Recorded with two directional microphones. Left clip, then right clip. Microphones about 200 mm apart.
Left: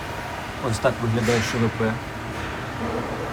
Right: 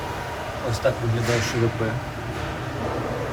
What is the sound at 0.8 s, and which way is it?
Speech, 5° left (ahead or behind).